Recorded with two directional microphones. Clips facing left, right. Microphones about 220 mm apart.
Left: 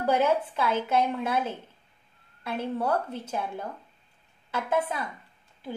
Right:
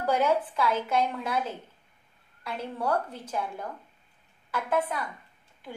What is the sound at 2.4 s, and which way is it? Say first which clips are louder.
A woman's voice: left 3 dB; 25° left (ahead or behind).